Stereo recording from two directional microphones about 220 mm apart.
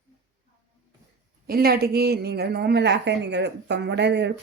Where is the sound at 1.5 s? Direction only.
45° right (ahead or behind).